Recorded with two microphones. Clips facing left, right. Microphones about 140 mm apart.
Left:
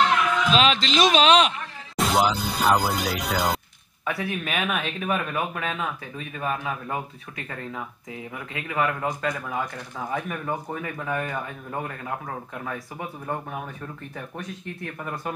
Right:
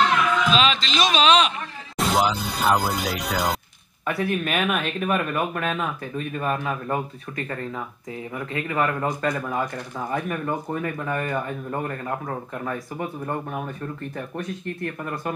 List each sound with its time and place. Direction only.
0.5 s a man's voice: 60° left (ahead or behind)
2.0 s speech: centre (ahead or behind)